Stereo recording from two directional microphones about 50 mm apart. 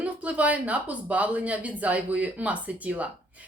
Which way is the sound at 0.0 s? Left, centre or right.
Right.